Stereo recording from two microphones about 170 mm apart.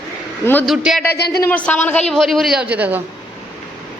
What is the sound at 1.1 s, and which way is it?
Speech, 70° left (ahead or behind).